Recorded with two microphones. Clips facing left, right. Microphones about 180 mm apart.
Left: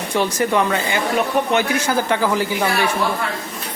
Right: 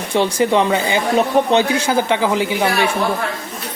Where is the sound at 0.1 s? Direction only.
25° right (ahead or behind).